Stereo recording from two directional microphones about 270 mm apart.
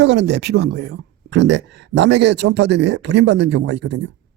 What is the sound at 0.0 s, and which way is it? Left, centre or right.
Speech, right.